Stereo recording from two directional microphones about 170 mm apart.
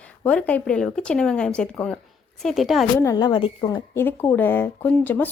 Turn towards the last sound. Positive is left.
turn(degrees=10)  # may be behind; listen again after turning